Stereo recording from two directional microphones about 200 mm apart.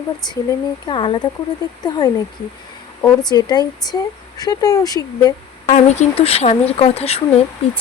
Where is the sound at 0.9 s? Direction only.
25° left (ahead or behind).